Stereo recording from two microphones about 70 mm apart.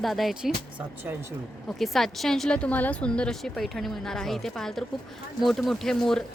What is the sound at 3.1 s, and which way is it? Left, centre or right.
Speech, centre.